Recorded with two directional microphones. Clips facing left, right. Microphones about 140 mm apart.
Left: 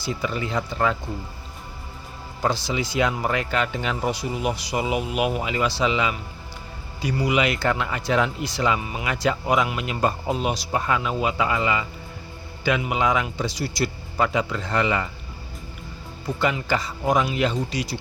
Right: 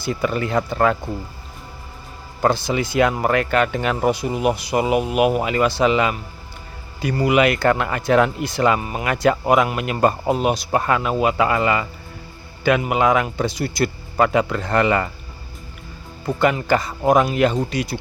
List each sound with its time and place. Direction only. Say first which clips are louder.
0.0 s speech: right 5 dB; 55° right (ahead or behind)
2.4 s speech: right 5 dB; 55° right (ahead or behind)
16.2 s speech: right 5 dB; 55° right (ahead or behind)